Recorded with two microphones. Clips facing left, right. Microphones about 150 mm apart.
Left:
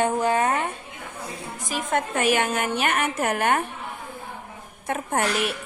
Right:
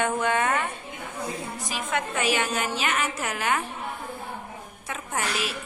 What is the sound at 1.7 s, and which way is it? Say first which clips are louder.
A woman's voice: left 5 dB; 50° left (ahead or behind).